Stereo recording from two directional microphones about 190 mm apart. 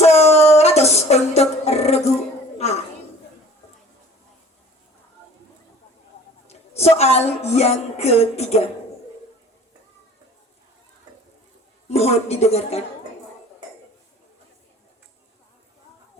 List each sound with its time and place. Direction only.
0.0 s music: 35° left (ahead or behind)
6.5 s a woman's voice: 35° left (ahead or behind)
11.9 s a woman's voice: 35° left (ahead or behind)